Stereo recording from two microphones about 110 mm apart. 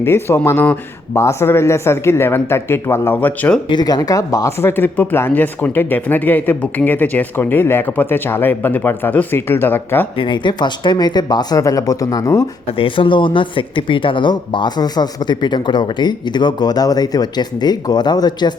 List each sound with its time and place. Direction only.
0.0 s speech: 20° left (ahead or behind)
3.7 s speech: 40° left (ahead or behind); by 10.1 s 20° left (ahead or behind)
10.2 s speech: 45° left (ahead or behind); by 12.5 s 30° left (ahead or behind)
12.7 s speech: 50° left (ahead or behind)